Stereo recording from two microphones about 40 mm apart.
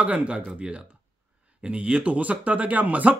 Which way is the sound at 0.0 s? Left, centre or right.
Right.